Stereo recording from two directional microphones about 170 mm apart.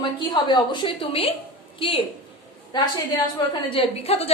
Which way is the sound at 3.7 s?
35° left (ahead or behind).